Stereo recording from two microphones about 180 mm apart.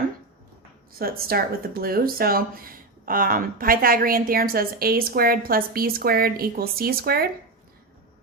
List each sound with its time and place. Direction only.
0.9 s speech: 55° right (ahead or behind)